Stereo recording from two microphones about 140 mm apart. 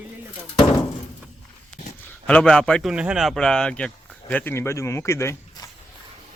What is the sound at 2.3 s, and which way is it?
Speech, 10° left (ahead or behind).